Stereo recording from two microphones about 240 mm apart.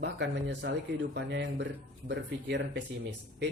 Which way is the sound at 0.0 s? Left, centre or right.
Right.